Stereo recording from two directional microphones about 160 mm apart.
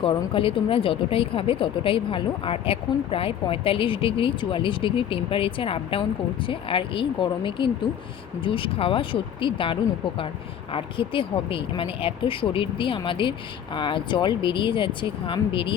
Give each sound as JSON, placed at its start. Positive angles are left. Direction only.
{"t": 0.0, "sound": "speech", "side_deg": 35}